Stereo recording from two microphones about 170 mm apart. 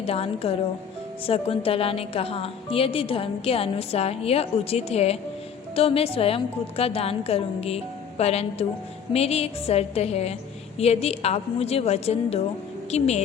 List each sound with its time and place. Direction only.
0.0 s a woman's voice: 35° left (ahead or behind)